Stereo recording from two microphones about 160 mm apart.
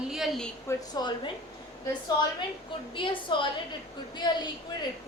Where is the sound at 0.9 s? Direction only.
25° left (ahead or behind).